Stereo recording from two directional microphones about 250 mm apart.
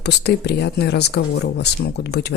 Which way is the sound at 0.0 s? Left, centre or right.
Left.